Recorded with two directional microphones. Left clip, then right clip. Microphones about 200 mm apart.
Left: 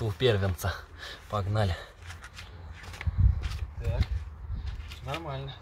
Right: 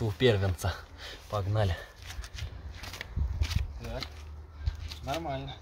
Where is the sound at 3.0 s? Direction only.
40° right (ahead or behind).